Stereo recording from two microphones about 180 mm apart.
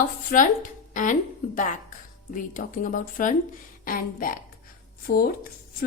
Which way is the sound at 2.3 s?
50° left (ahead or behind).